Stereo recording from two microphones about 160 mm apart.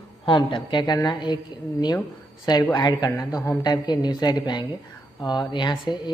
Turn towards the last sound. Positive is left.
turn(degrees=30)  # may be behind; listen again after turning